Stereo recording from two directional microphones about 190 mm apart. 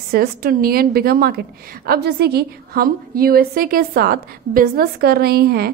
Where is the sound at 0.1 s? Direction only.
55° right (ahead or behind).